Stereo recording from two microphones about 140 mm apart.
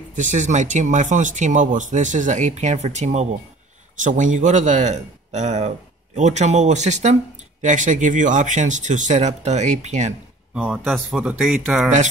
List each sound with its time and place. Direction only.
0.1 s speech: 60° right (ahead or behind)
10.5 s speech: 5° right (ahead or behind)